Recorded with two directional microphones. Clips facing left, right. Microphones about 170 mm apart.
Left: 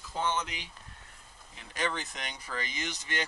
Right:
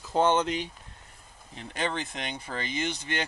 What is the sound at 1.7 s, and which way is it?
Speech, 25° right (ahead or behind).